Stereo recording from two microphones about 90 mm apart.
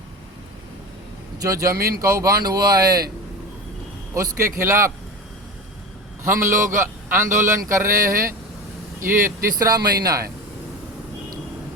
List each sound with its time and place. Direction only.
1.4 s speech: 40° right (ahead or behind)
4.1 s speech: 35° right (ahead or behind)
6.2 s a man's voice: 30° right (ahead or behind)
9.6 s speech: 45° right (ahead or behind)